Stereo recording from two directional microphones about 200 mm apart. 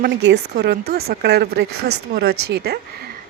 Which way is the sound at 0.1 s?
60° right (ahead or behind).